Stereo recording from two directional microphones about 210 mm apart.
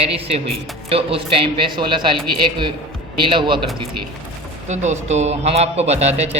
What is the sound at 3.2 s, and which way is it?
Speech, 25° right (ahead or behind).